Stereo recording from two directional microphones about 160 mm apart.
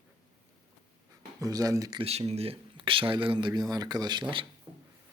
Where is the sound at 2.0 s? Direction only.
40° right (ahead or behind).